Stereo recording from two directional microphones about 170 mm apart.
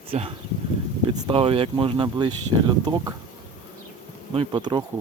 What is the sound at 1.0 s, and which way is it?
Speech, 25° right (ahead or behind).